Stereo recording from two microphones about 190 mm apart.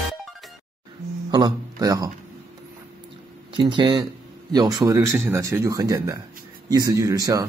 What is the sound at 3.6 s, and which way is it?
Speech, 25° right (ahead or behind).